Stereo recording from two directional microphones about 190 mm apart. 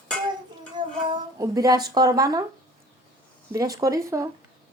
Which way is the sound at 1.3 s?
20° right (ahead or behind).